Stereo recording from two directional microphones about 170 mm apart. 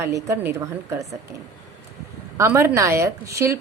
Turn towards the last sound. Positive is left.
turn(degrees=-15)  # may be behind; listen again after turning